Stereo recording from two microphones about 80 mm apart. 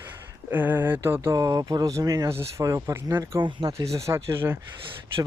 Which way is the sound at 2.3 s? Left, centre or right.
Right.